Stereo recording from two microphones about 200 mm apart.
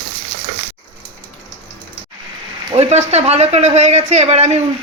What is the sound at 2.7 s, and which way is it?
Speech, 35° right (ahead or behind).